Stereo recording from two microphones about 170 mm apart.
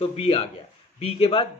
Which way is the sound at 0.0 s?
35° left (ahead or behind).